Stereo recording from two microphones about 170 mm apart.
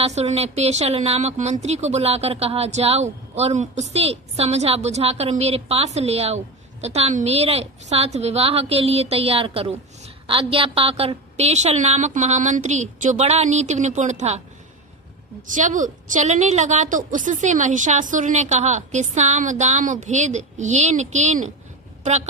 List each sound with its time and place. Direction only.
0.0 s speech: 40° right (ahead or behind)
15.4 s a woman's voice: 50° right (ahead or behind)